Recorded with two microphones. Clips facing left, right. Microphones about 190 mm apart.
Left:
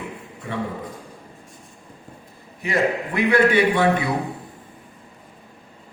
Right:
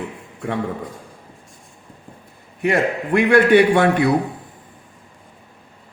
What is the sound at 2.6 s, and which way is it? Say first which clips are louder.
A man's voice: right 3 dB; 65° right (ahead or behind).